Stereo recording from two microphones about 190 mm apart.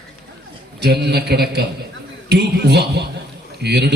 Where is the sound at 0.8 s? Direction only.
60° right (ahead or behind).